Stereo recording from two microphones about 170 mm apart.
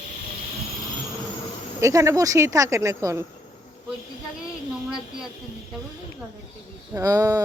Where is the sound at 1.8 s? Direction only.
20° right (ahead or behind).